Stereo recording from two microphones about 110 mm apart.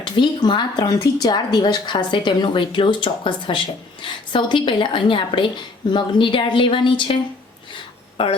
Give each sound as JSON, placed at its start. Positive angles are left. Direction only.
{"t": 0.0, "sound": "a woman's voice", "side_deg": 45}